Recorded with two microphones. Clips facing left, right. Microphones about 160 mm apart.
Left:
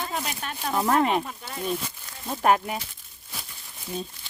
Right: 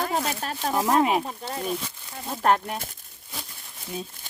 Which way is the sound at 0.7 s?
Centre (ahead or behind).